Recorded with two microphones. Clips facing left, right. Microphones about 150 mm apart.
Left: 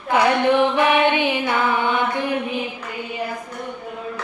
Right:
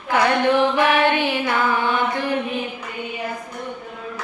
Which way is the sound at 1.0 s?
15° left (ahead or behind).